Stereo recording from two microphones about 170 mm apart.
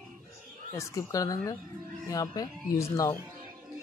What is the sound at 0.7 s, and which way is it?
A woman's voice, 20° left (ahead or behind).